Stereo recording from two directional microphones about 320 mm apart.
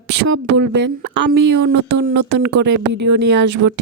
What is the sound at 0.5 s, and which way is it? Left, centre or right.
Speech, right.